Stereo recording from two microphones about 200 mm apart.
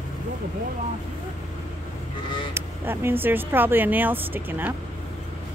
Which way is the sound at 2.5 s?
10° right (ahead or behind).